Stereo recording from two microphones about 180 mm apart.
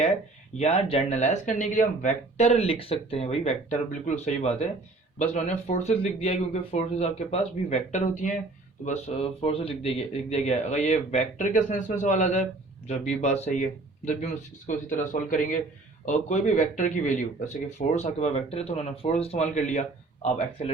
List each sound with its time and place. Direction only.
0.6 s speech: 35° left (ahead or behind)